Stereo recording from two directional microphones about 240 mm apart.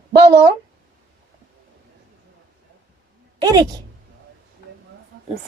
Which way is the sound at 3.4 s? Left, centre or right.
Centre.